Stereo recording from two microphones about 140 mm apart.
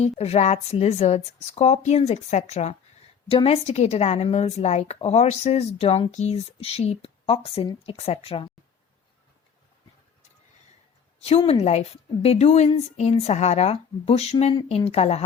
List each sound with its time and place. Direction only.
0.0 s a woman's voice: 50° left (ahead or behind)
3.2 s a woman's voice: 40° left (ahead or behind)
11.2 s a woman's voice: 45° left (ahead or behind)